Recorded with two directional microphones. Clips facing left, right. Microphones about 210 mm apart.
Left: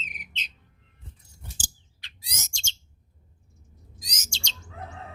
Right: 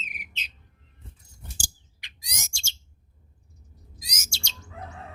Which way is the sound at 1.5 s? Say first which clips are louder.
Even; 15° right (ahead or behind).